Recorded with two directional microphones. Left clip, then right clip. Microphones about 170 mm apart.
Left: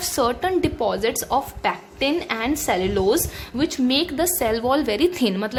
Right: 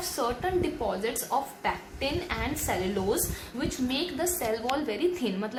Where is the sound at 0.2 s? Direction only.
75° left (ahead or behind).